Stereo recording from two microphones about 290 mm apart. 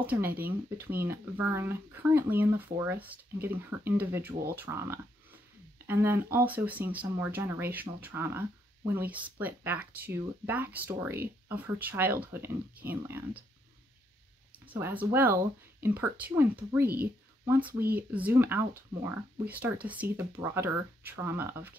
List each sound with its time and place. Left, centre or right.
0.0 s speech: centre
14.7 s speech: centre
16.8 s speech: right
17.5 s speech: centre